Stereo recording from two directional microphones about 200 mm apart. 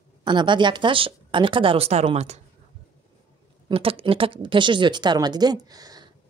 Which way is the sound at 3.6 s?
30° right (ahead or behind).